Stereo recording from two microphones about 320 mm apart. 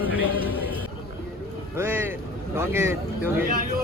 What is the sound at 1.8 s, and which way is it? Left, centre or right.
Vehicle, centre.